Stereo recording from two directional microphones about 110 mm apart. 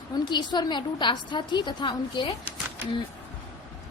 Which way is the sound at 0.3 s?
45° left (ahead or behind).